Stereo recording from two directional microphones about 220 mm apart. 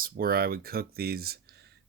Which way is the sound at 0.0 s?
40° right (ahead or behind).